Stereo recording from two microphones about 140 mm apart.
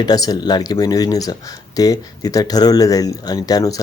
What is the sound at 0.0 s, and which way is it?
Speech, 30° left (ahead or behind).